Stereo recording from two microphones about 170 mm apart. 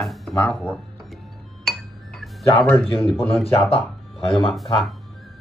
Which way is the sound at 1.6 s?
Centre (ahead or behind).